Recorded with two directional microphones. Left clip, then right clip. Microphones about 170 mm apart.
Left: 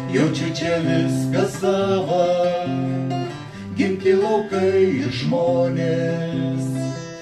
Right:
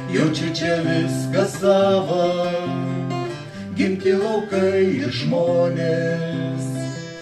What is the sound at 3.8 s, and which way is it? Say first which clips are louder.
Music: left 1 dB; 20° right (ahead or behind).